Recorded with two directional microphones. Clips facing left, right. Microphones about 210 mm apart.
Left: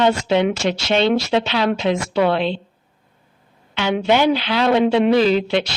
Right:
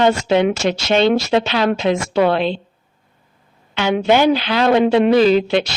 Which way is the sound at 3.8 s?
45° right (ahead or behind).